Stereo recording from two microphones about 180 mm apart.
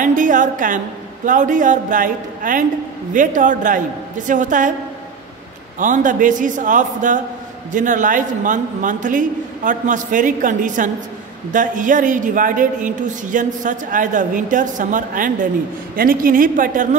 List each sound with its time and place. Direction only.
0.0 s a woman's voice: 45° right (ahead or behind)
5.8 s a man's voice: 45° right (ahead or behind)